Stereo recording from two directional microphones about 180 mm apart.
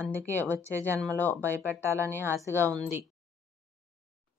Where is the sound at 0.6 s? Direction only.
15° right (ahead or behind).